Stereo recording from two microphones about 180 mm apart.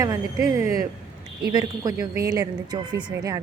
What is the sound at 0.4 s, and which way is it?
Speech, 15° right (ahead or behind).